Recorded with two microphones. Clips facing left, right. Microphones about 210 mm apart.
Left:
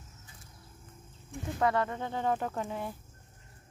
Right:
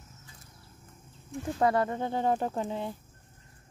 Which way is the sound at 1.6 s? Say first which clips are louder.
Right 3 dB; 35° right (ahead or behind).